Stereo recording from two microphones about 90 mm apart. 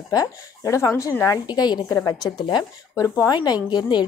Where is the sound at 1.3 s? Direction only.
50° left (ahead or behind).